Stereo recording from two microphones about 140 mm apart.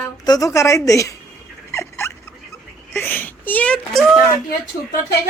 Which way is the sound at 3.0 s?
15° left (ahead or behind).